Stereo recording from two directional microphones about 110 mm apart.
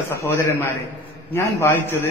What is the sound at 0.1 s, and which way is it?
A man's voice, 25° left (ahead or behind).